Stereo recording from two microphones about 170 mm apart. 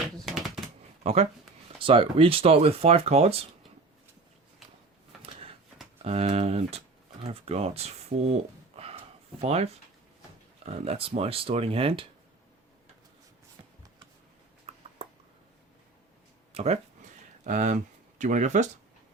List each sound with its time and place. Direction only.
0.3 s typewriter: centre (ahead or behind)
1.0 s speech: 40° right (ahead or behind)
5.2 s a sound: 35° right (ahead or behind)
6.0 s speech: 35° right (ahead or behind)
10.7 s speech: 35° right (ahead or behind)
14.7 s a sound: 40° right (ahead or behind)
17.4 s speech: 45° right (ahead or behind)